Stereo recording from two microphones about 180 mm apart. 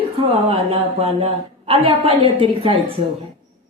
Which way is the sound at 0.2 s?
30° right (ahead or behind).